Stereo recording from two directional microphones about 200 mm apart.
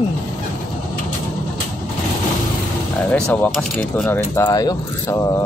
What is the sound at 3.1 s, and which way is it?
Speech, 5° left (ahead or behind).